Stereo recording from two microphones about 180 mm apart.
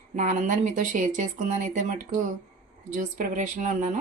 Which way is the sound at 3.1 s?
45° right (ahead or behind).